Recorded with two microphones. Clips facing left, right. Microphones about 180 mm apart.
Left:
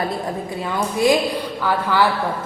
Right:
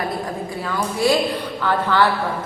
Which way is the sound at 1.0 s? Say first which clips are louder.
Left 1 dB; 20° left (ahead or behind).